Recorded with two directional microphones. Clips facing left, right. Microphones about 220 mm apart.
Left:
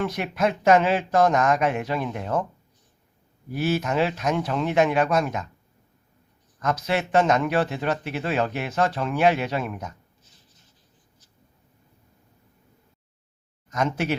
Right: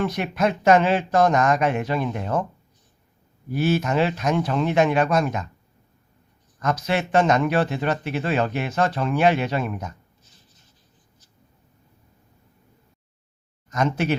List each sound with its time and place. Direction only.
0.0 s a man's voice: 5° left (ahead or behind)
3.5 s a man's voice: 5° left (ahead or behind)
6.6 s a man's voice: 5° left (ahead or behind)
13.7 s speech: 5° left (ahead or behind)